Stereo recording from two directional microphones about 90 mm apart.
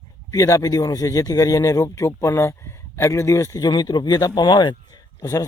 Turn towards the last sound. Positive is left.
turn(degrees=50)  # may be behind; listen again after turning